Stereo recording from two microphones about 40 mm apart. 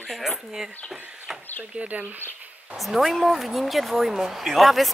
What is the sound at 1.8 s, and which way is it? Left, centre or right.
Speech, right.